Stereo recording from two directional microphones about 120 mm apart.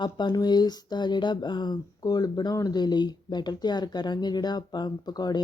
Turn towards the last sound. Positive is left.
turn(degrees=35)  # may be behind; listen again after turning